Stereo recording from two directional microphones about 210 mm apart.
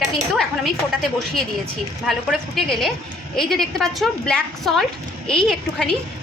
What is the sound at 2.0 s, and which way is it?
A woman's voice, centre (ahead or behind).